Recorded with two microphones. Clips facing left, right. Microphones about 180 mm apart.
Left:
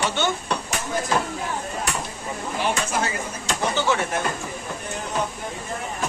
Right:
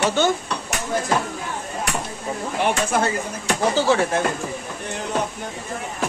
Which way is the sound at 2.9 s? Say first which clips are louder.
Right 4 dB; 55° right (ahead or behind).